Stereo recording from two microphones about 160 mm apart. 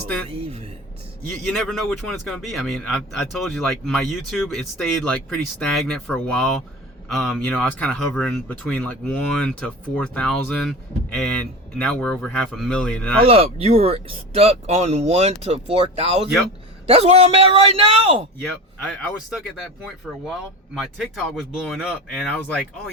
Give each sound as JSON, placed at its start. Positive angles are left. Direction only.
{"t": 0.3, "sound": "speech", "side_deg": -35}
{"t": 1.5, "sound": "speech", "side_deg": 0}
{"t": 13.2, "sound": "speech", "side_deg": -40}
{"t": 20.2, "sound": "speech", "side_deg": -5}